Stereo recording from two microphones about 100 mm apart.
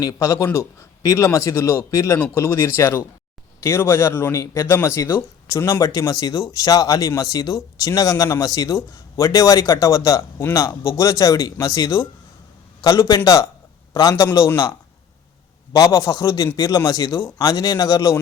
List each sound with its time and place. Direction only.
0.0 s speech: 35° left (ahead or behind)